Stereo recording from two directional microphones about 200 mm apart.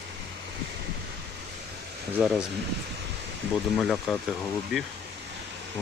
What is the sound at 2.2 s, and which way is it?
Speech, 5° right (ahead or behind).